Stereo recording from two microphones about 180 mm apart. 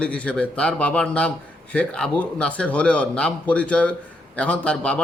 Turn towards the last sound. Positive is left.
turn(degrees=5)  # may be behind; listen again after turning